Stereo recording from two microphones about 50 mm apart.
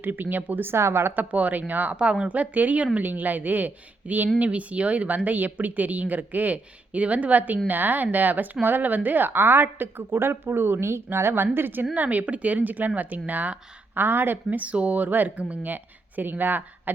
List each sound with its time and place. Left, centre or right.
0.0 s speech: right
0.7 s a woman's voice: right
1.1 s speech: right
2.0 s speech: right
3.0 s a woman's voice: right
11.5 s a woman's voice: right
11.9 s speech: right